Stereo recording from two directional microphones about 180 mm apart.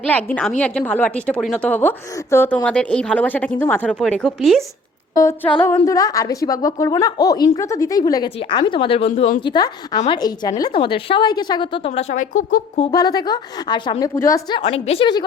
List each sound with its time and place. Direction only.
0.1 s a woman's voice: 10° left (ahead or behind)
5.1 s a woman's voice: 15° left (ahead or behind)
11.9 s speech: 45° left (ahead or behind)
12.9 s a woman's voice: 20° left (ahead or behind)
14.6 s a woman's voice: 35° left (ahead or behind)